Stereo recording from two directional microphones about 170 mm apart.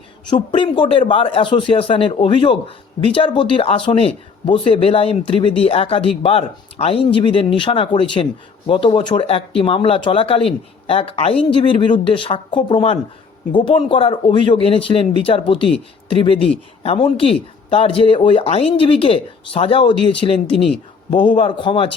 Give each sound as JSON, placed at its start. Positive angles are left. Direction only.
{"t": 0.3, "sound": "speech", "side_deg": 30}